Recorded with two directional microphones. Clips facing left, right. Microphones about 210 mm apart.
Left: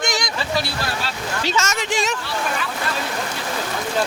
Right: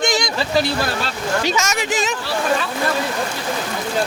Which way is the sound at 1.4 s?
15° right (ahead or behind).